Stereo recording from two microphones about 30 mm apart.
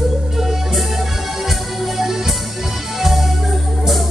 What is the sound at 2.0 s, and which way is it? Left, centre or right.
Music, centre.